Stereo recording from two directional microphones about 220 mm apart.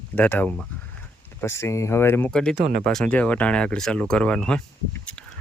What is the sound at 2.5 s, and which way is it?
Speech, 35° right (ahead or behind).